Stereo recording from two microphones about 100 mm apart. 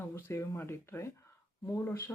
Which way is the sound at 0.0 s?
25° left (ahead or behind).